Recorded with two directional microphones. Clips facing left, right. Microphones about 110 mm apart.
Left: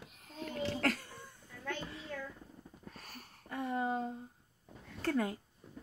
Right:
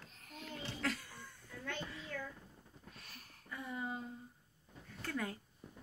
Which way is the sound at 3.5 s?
60° left (ahead or behind).